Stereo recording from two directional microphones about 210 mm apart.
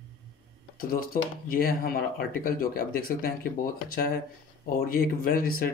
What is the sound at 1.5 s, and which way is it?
Speech, 45° left (ahead or behind).